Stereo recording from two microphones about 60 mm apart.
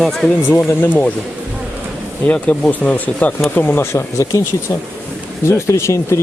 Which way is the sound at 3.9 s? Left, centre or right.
Left.